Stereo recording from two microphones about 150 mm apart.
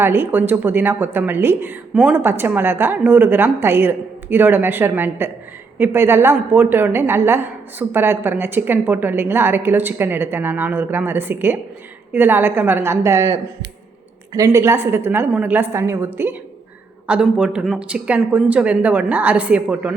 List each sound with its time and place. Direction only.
0.0 s a woman's voice: 15° right (ahead or behind)
14.3 s a woman's voice: 20° right (ahead or behind)